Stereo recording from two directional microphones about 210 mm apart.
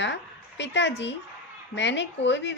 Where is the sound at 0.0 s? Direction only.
60° left (ahead or behind).